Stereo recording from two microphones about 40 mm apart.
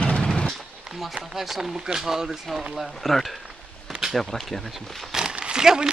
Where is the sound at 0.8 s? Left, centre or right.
Centre.